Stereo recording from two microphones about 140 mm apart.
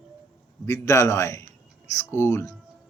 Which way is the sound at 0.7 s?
20° left (ahead or behind).